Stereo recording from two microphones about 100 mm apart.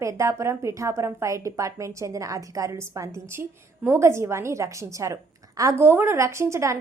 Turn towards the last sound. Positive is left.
turn(degrees=-30)  # may be behind; listen again after turning